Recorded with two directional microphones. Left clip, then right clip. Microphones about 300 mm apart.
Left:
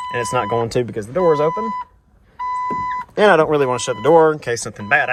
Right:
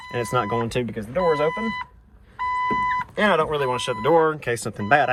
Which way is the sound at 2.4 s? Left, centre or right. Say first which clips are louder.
Left 2 dB; left.